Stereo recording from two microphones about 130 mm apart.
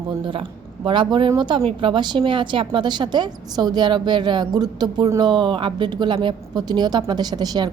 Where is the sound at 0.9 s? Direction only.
40° right (ahead or behind).